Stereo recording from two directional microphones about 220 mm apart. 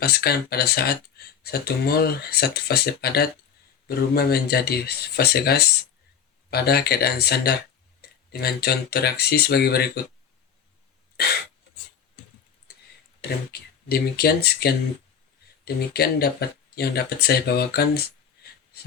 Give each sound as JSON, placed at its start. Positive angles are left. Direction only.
{"t": 0.0, "sound": "speech", "side_deg": 45}
{"t": 12.7, "sound": "a sound", "side_deg": 45}
{"t": 13.5, "sound": "speech", "side_deg": 45}